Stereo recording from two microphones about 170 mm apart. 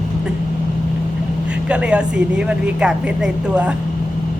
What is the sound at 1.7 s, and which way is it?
Speech, 5° right (ahead or behind).